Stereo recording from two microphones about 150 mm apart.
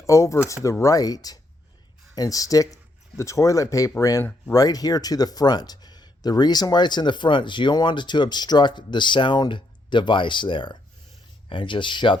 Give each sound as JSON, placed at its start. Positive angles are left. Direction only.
{"t": 0.0, "sound": "speech", "side_deg": 20}